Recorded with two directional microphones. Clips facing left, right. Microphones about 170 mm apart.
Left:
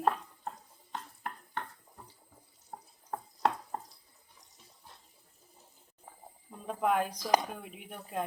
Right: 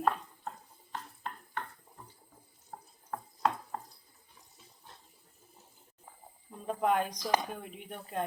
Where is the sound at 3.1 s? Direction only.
30° left (ahead or behind).